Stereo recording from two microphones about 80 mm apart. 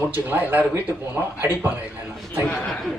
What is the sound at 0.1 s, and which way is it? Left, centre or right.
Speech, right.